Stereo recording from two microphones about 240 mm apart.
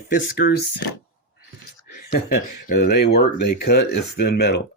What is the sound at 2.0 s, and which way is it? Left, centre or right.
Speech, left.